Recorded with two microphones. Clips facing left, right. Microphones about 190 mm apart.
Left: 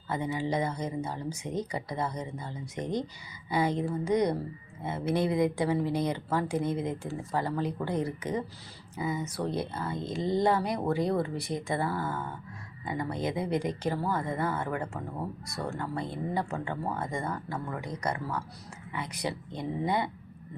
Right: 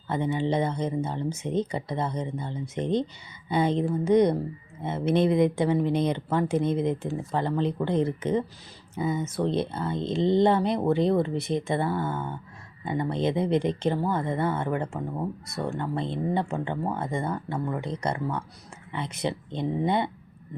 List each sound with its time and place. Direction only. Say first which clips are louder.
0.1 s speech: right 4 dB; 25° right (ahead or behind)